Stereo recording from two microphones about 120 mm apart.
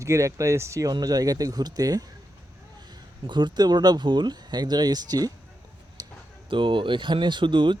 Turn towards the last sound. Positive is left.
turn(degrees=-45)  # may be behind; listen again after turning